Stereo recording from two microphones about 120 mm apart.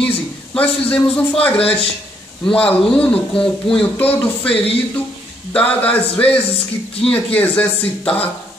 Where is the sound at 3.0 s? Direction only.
10° left (ahead or behind).